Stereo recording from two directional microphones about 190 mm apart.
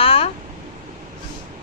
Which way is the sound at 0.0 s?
30° left (ahead or behind).